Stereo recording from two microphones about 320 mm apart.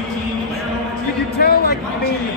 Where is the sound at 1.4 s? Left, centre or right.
Left.